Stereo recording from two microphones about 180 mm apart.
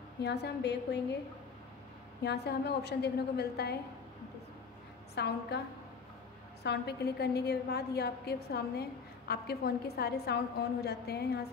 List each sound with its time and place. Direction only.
0.2 s a woman's voice: 65° left (ahead or behind)
2.2 s a woman's voice: 65° left (ahead or behind)
5.1 s a woman's voice: 65° left (ahead or behind)
6.6 s a woman's voice: 65° left (ahead or behind)